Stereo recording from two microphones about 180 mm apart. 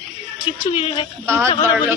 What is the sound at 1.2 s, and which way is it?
Speech, 15° right (ahead or behind).